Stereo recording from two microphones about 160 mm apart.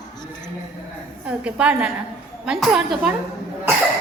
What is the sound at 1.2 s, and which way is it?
A woman's voice, 5° right (ahead or behind).